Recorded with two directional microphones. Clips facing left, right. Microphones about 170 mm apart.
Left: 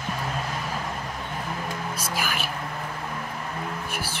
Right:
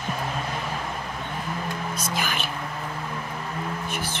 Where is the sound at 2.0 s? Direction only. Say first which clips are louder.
Right 1 dB; 5° left (ahead or behind).